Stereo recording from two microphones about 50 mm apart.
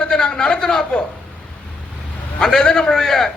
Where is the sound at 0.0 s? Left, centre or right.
Centre.